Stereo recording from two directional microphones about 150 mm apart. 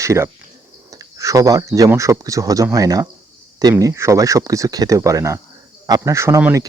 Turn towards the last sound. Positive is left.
turn(degrees=-20)  # may be behind; listen again after turning